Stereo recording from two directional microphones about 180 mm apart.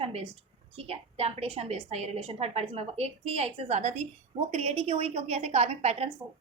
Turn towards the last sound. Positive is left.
turn(degrees=-35)  # may be behind; listen again after turning